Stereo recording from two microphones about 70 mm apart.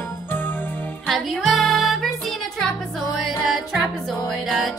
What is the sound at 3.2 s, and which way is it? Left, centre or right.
Music, centre.